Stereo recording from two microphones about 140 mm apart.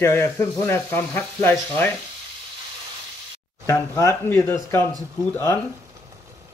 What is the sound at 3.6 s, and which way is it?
Speech, 20° left (ahead or behind).